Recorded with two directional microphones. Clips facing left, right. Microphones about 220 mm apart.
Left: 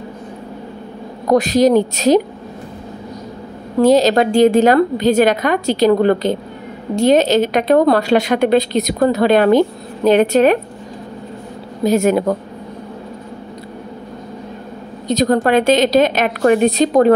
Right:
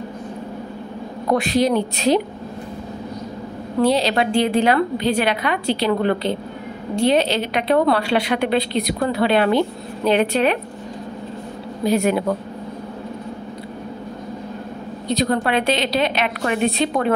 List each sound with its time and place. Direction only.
1.3 s a woman's voice: 40° left (ahead or behind)
3.8 s a woman's voice: 45° left (ahead or behind)
11.8 s a woman's voice: 45° left (ahead or behind)
15.0 s a woman's voice: 45° left (ahead or behind)